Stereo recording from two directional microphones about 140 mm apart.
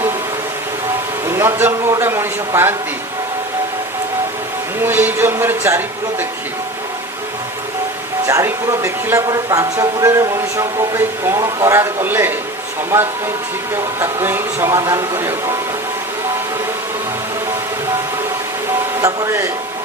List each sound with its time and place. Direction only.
1.3 s speech: 20° right (ahead or behind)
4.8 s speech: 15° right (ahead or behind)
8.3 s speech: 20° right (ahead or behind)
14.0 s speech: 15° right (ahead or behind)
19.0 s speech: 20° right (ahead or behind)